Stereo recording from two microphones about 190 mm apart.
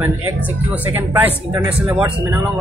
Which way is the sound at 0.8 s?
10° right (ahead or behind).